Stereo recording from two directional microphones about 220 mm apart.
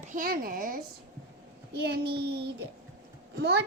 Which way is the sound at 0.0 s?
35° right (ahead or behind).